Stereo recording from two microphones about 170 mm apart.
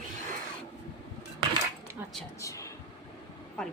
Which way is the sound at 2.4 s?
20° left (ahead or behind).